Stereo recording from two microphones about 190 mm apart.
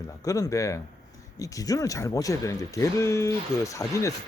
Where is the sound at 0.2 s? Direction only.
15° left (ahead or behind).